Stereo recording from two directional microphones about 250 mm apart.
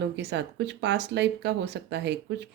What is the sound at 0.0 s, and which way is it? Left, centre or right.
A woman's voice, right.